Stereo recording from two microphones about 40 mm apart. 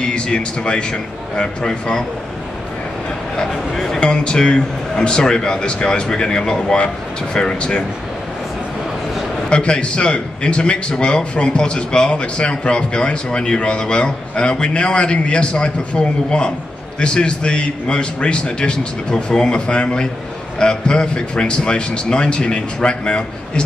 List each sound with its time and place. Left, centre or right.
0.0 s a man's voice: left
3.3 s speech: centre
4.0 s a man's voice: left
9.5 s a man's voice: left